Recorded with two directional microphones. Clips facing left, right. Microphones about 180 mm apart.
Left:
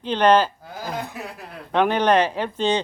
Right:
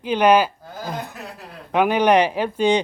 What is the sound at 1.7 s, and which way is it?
Speech, 10° right (ahead or behind).